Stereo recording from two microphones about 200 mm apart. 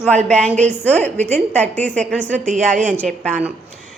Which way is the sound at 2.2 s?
35° right (ahead or behind).